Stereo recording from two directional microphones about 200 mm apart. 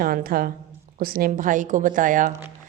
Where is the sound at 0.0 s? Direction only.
45° right (ahead or behind).